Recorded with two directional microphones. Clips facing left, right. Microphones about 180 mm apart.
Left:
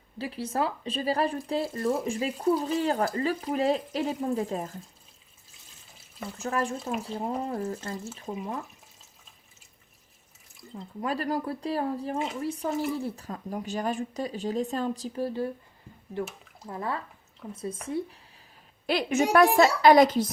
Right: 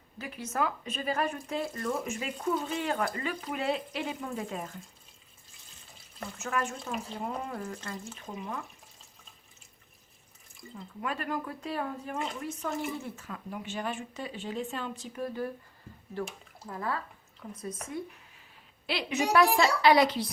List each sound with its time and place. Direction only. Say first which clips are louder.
0.2 s speech: left 3 dB; 30° left (ahead or behind)
6.4 s speech: left 4 dB; 35° left (ahead or behind)
8.0 s speech: left 5 dB; 5° left (ahead or behind)
10.8 s speech: left 5 dB; 35° left (ahead or behind)
17.4 s speech: left 3 dB; 10° left (ahead or behind)
17.8 s speech: left 8 dB; 30° left (ahead or behind)
18.9 s a woman's voice: left 5 dB; 45° left (ahead or behind)